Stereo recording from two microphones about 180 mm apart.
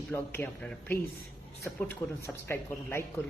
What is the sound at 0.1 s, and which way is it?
A man's voice, 10° left (ahead or behind).